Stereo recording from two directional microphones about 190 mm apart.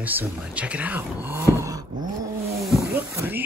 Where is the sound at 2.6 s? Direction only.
Centre (ahead or behind).